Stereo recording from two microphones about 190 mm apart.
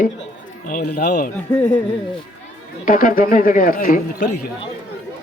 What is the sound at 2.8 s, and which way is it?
Speech, 45° left (ahead or behind).